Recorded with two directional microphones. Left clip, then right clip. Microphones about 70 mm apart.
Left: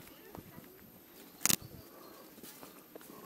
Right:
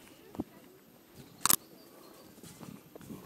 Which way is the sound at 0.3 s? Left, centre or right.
Left.